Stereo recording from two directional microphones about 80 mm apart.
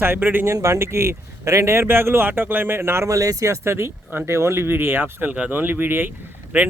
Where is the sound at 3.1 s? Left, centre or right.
Right.